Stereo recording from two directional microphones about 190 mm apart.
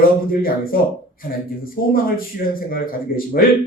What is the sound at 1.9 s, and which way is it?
A man's voice, 50° left (ahead or behind).